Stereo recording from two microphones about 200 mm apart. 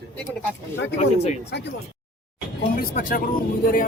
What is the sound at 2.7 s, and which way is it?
Speech, 45° left (ahead or behind).